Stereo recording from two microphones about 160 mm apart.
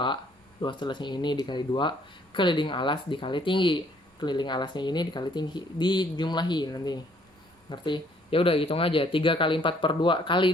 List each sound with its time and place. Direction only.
0.6 s speech: 30° left (ahead or behind)